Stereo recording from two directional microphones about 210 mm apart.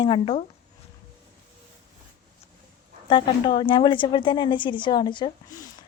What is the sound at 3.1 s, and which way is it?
A woman's voice, 25° left (ahead or behind).